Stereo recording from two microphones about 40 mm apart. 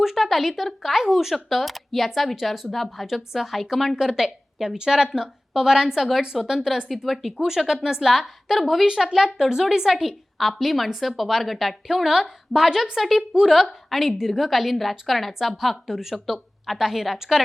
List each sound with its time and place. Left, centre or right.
0.0 s a woman's voice: centre
3.9 s a woman's voice: centre
6.3 s a woman's voice: centre
7.4 s a woman's voice: centre
10.3 s a woman's voice: centre